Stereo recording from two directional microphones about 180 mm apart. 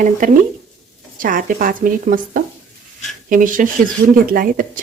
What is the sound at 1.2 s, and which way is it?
A woman's voice, 50° right (ahead or behind).